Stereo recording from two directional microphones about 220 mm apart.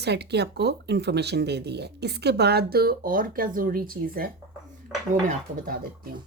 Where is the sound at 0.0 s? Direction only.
50° right (ahead or behind).